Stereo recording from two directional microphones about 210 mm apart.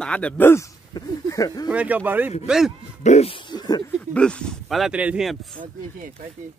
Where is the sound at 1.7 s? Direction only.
5° right (ahead or behind).